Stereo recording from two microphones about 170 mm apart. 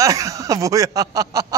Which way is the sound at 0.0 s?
20° right (ahead or behind).